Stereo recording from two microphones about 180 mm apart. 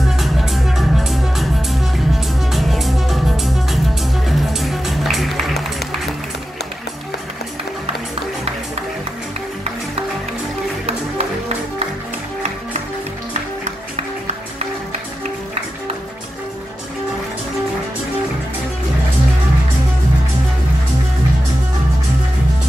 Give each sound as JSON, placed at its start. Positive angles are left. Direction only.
{"t": 0.2, "sound": "music", "side_deg": 0}
{"t": 10.9, "sound": "music", "side_deg": -35}